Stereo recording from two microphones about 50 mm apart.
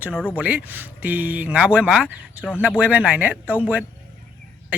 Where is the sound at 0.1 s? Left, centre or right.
Left.